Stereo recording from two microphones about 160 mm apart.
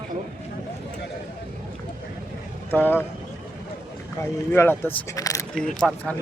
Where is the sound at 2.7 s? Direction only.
15° left (ahead or behind).